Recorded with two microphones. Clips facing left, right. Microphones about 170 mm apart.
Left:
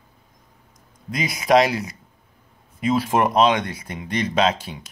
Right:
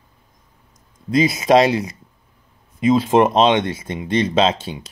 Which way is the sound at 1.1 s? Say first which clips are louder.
Right 4 dB; 25° right (ahead or behind).